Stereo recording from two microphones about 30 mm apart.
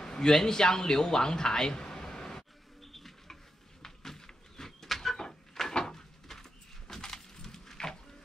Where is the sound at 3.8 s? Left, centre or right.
Centre.